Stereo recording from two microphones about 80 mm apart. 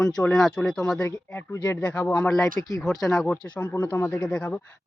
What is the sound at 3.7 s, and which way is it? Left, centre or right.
Speech, left.